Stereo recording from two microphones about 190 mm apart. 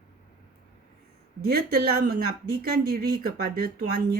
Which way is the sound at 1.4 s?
55° right (ahead or behind).